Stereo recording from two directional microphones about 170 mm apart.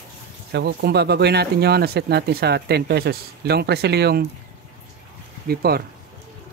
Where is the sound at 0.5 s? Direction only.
80° right.